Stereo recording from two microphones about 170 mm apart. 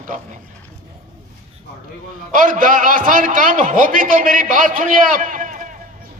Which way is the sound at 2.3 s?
50° right (ahead or behind).